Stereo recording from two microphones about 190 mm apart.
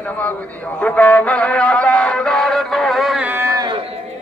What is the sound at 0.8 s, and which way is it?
Music, 5° left (ahead or behind).